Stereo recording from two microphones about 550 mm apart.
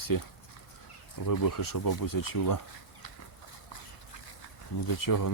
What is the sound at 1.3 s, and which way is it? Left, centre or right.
Speech, left.